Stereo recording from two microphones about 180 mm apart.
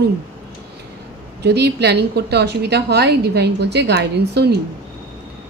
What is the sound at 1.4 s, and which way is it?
Speech, 70° right (ahead or behind).